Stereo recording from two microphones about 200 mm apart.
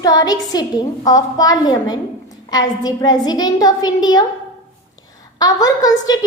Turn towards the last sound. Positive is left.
turn(degrees=20)  # may be behind; listen again after turning